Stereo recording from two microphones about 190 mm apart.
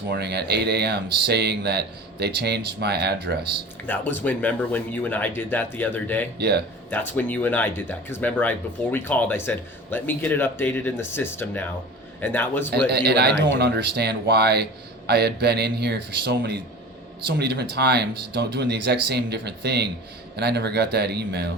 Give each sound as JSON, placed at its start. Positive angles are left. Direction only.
{"t": 0.1, "sound": "speech", "side_deg": -60}
{"t": 3.8, "sound": "speech", "side_deg": 10}
{"t": 6.4, "sound": "speech", "side_deg": -60}
{"t": 6.9, "sound": "speech", "side_deg": 10}
{"t": 12.7, "sound": "speech", "side_deg": -60}